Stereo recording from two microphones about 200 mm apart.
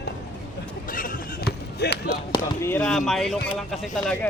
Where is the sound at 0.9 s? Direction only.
45° left (ahead or behind).